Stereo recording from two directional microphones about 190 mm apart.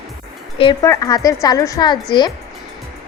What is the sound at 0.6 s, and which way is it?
Speech, 20° left (ahead or behind).